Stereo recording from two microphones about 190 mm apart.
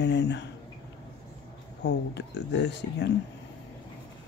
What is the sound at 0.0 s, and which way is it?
Speech, 65° left (ahead or behind).